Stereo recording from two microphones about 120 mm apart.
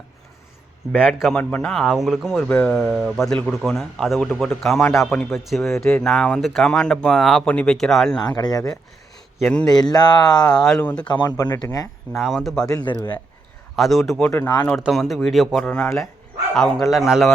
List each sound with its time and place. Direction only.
0.9 s speech: centre (ahead or behind)
1.4 s speech: 10° left (ahead or behind)
8.2 s speech: 35° left (ahead or behind)
9.4 s speech: 5° left (ahead or behind)
9.7 s speech: 35° left (ahead or behind)
10.5 s speech: 5° left (ahead or behind)
11.1 s speech: 35° left (ahead or behind)
12.1 s speech: centre (ahead or behind)
12.6 s speech: 35° left (ahead or behind)
13.7 s speech: centre (ahead or behind)
14.3 s speech: 20° left (ahead or behind)
14.8 s speech: centre (ahead or behind)